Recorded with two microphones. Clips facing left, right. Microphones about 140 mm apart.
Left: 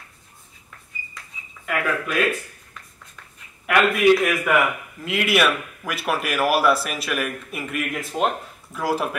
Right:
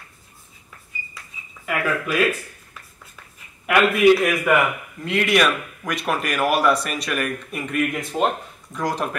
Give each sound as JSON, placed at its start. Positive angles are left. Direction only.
{"t": 1.2, "sound": "bird", "side_deg": -5}
{"t": 1.7, "sound": "a man's voice", "side_deg": 0}
{"t": 3.6, "sound": "a man's voice", "side_deg": 0}